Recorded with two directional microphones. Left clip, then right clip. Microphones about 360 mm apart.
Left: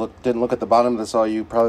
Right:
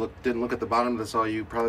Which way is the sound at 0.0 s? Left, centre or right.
Centre.